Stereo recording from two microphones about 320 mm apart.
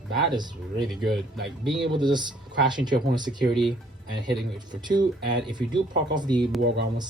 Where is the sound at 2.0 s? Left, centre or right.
Centre.